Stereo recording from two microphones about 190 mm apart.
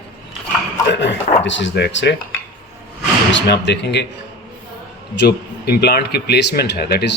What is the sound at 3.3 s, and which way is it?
Speech, 65° left (ahead or behind).